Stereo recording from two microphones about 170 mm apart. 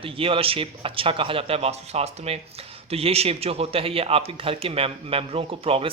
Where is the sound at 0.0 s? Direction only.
30° right (ahead or behind).